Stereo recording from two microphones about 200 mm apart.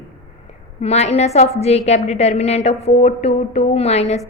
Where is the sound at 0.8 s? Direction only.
30° left (ahead or behind).